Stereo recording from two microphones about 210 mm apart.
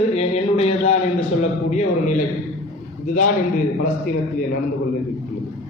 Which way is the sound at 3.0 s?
35° left (ahead or behind).